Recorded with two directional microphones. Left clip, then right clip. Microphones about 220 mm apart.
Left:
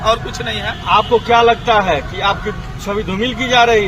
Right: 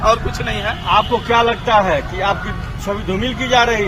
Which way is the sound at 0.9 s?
50° left (ahead or behind).